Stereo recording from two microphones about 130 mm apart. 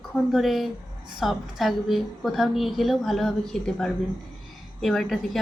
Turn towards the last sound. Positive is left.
turn(degrees=0)  # may be behind; listen again after turning